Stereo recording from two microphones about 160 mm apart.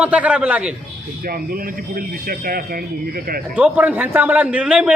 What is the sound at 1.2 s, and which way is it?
Speech, 65° right (ahead or behind).